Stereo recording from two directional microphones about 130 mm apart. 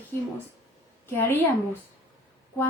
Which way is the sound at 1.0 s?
15° left (ahead or behind).